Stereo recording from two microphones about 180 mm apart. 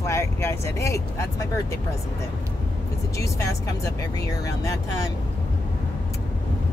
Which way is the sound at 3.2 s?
15° left (ahead or behind).